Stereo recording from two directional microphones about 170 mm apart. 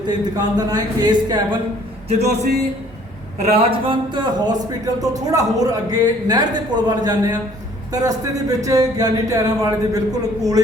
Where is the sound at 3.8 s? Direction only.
25° right (ahead or behind).